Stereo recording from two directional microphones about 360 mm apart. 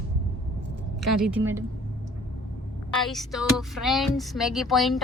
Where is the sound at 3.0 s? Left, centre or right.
Centre.